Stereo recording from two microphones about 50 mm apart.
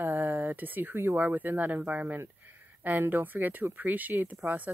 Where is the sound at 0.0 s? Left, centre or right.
Right.